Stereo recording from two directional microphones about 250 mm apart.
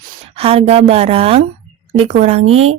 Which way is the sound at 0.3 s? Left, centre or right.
Right.